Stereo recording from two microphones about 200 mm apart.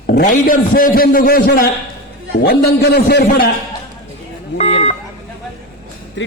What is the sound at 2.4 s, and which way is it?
A man's voice, 55° left (ahead or behind).